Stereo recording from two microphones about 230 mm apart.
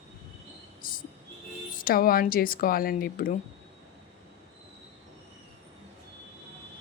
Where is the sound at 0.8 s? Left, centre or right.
Left.